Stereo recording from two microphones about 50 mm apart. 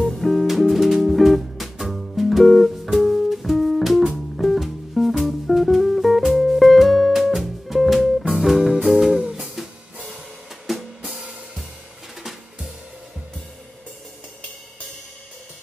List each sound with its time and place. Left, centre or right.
0.0 s music: centre
10.7 s drum kit: centre
11.1 s music: right
12.2 s drum: centre